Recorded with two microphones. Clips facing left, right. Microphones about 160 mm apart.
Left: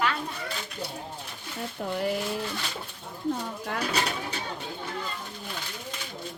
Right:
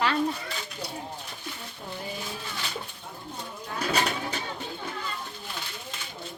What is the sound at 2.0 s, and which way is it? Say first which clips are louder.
Speech: left 9 dB; 75° left (ahead or behind).